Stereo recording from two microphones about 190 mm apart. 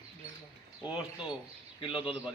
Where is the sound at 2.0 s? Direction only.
5° right (ahead or behind).